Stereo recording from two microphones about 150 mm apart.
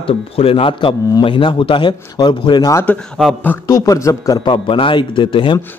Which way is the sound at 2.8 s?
5° left (ahead or behind).